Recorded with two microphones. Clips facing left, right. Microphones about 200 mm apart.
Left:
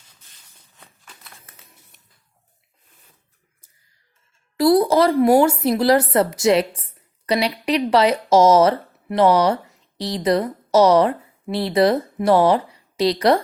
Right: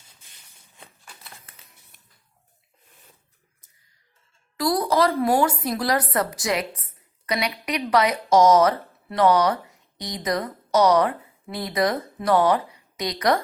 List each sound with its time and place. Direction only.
4.5 s a woman's voice: 25° left (ahead or behind)